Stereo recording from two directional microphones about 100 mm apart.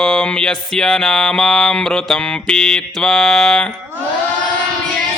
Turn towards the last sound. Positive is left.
turn(degrees=5)  # may be behind; listen again after turning